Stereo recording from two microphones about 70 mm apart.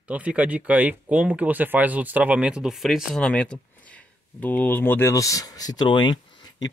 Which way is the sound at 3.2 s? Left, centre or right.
Centre.